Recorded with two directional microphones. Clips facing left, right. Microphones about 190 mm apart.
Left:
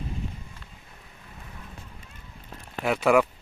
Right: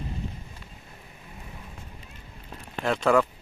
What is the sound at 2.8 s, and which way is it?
Speech, 10° left (ahead or behind).